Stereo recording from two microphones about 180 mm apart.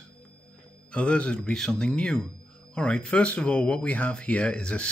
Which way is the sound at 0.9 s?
5° left (ahead or behind).